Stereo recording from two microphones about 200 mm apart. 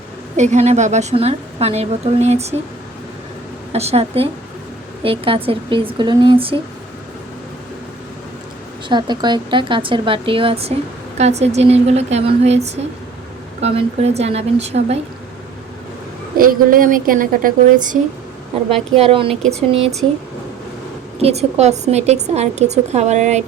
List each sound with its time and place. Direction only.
0.3 s a woman's voice: 35° right (ahead or behind)
3.7 s a woman's voice: 30° right (ahead or behind)
8.9 s a woman's voice: 20° right (ahead or behind)
16.4 s a woman's voice: 45° right (ahead or behind)
18.7 s a woman's voice: 30° right (ahead or behind)
21.2 s a woman's voice: 30° right (ahead or behind)